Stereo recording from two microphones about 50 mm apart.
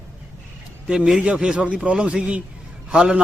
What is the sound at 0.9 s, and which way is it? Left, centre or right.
A man's voice, centre.